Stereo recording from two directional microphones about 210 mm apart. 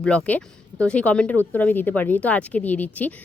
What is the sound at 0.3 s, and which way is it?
A woman's voice, 5° left (ahead or behind).